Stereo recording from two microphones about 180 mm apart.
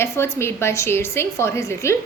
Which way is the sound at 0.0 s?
15° left (ahead or behind).